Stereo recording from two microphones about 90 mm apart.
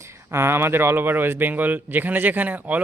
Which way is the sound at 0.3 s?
25° right (ahead or behind).